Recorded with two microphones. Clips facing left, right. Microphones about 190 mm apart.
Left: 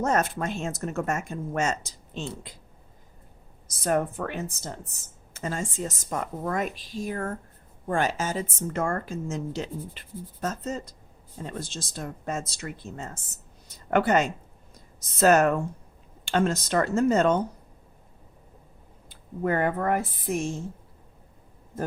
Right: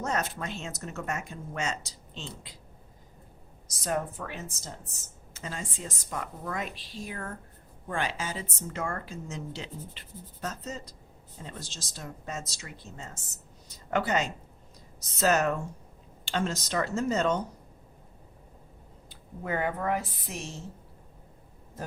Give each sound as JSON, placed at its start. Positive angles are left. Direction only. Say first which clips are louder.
{"t": 0.0, "sound": "speech", "louder": "left 6 dB", "side_deg": 50}
{"t": 3.7, "sound": "speech", "louder": "left 6 dB", "side_deg": 55}
{"t": 5.3, "sound": "speech", "louder": "left 7 dB", "side_deg": 50}
{"t": 19.0, "sound": "speech", "louder": "left 9 dB", "side_deg": 50}